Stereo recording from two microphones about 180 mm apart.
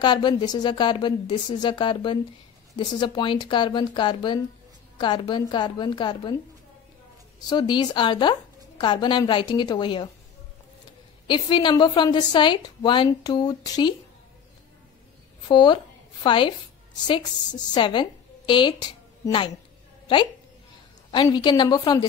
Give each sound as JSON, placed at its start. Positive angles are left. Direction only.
{"t": 0.0, "sound": "a woman's voice", "side_deg": 25}
{"t": 7.4, "sound": "a woman's voice", "side_deg": 25}
{"t": 11.2, "sound": "a woman's voice", "side_deg": 25}
{"t": 15.4, "sound": "a woman's voice", "side_deg": 25}
{"t": 21.1, "sound": "a woman's voice", "side_deg": 25}